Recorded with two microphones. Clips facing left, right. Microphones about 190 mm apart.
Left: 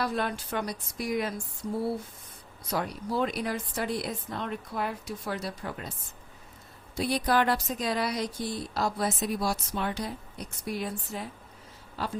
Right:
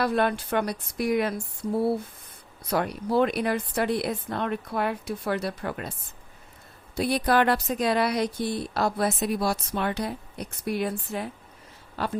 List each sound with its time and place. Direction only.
0.0 s speech: 60° right (ahead or behind)
2.6 s speech: 60° right (ahead or behind)
6.9 s speech: 60° right (ahead or behind)